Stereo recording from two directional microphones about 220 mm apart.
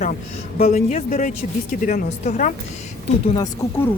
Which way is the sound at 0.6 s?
30° left (ahead or behind).